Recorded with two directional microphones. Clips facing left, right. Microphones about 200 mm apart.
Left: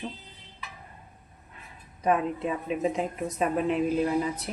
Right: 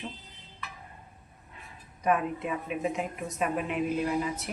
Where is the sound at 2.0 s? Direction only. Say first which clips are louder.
Left 2 dB; 30° left (ahead or behind).